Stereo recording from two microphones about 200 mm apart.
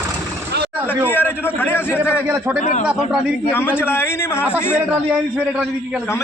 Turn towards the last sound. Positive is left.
turn(degrees=10)  # may be behind; listen again after turning